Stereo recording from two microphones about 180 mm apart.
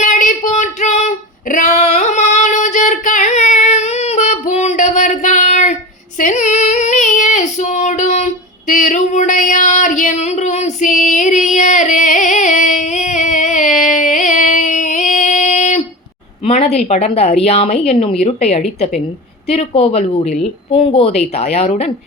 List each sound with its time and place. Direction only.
0.0 s female singing: 45° left (ahead or behind)
16.4 s a woman's voice: 35° left (ahead or behind)
19.5 s speech: 35° left (ahead or behind)